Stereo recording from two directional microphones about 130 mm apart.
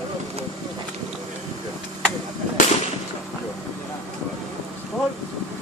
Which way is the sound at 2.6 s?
90° left.